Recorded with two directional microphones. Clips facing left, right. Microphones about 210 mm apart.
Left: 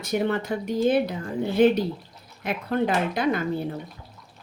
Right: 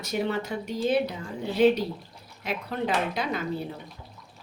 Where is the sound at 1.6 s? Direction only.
55° left (ahead or behind).